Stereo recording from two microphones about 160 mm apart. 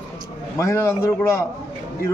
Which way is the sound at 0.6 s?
15° left (ahead or behind).